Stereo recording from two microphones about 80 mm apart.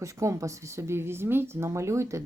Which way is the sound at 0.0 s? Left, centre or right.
Right.